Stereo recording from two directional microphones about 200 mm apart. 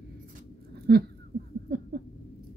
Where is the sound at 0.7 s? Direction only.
50° right (ahead or behind).